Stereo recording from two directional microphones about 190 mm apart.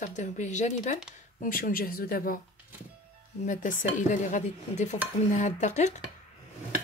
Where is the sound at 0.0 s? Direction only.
40° left (ahead or behind).